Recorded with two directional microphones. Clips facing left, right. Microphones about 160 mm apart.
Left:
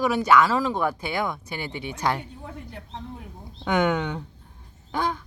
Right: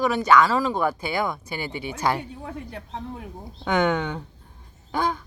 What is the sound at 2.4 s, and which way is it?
Speech, 60° right (ahead or behind).